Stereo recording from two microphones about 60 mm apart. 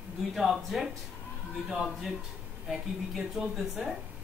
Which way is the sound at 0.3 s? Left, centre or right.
Centre.